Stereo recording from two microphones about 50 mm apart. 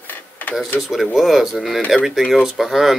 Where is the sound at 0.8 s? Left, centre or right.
Centre.